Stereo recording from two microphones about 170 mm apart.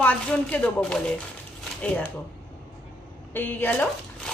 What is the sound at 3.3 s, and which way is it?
Speech, 10° left (ahead or behind).